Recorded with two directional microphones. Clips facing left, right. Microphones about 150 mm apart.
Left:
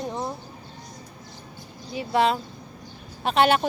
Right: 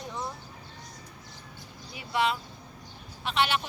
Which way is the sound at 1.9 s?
35° left (ahead or behind).